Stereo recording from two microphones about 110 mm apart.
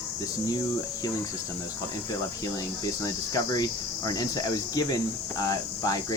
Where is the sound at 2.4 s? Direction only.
35° left (ahead or behind).